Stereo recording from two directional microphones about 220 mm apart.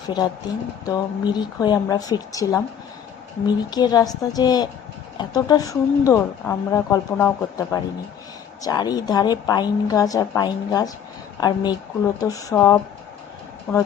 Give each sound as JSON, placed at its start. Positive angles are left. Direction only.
{"t": 0.1, "sound": "speech", "side_deg": 20}